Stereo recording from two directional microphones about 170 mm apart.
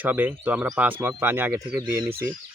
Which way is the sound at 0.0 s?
10° right (ahead or behind).